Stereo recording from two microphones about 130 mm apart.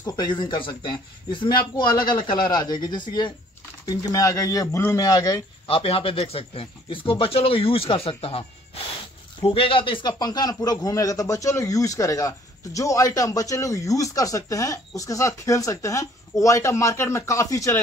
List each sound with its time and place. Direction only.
0.0 s a man's voice: 35° left (ahead or behind)
5.7 s a man's voice: 45° left (ahead or behind); by 17.7 s 25° left (ahead or behind)